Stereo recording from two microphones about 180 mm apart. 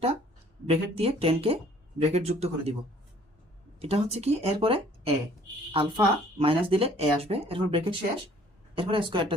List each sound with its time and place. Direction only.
0.7 s speech: 30° right (ahead or behind)
3.8 s a woman's voice: 35° right (ahead or behind)